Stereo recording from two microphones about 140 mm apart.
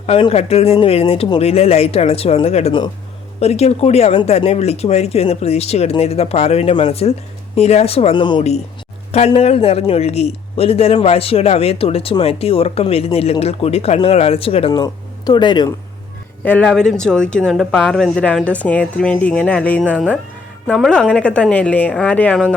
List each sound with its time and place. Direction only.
0.2 s a man's voice: 45° left (ahead or behind)
8.1 s speech: 35° left (ahead or behind)
9.1 s a man's voice: 50° left (ahead or behind)
14.7 s speech: 30° left (ahead or behind)
16.4 s speech: 10° left (ahead or behind)